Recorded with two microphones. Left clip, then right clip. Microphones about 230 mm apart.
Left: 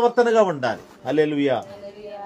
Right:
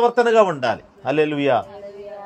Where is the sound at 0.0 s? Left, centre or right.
Right.